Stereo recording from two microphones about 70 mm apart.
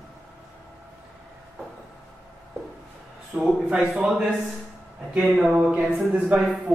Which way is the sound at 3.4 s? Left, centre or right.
Centre.